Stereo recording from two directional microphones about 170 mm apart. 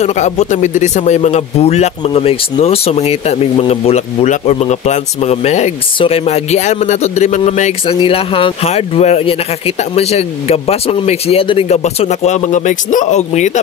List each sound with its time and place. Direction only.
0.0 s speech: 40° left (ahead or behind)
7.8 s speech: 30° left (ahead or behind)